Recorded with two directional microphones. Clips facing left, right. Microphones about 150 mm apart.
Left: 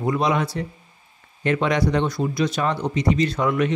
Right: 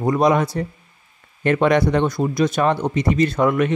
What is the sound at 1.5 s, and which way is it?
Speech, 55° right (ahead or behind).